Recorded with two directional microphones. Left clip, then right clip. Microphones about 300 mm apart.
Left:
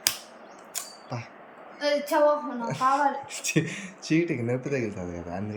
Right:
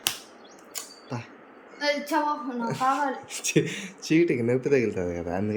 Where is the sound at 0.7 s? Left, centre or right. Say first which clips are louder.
Even; centre.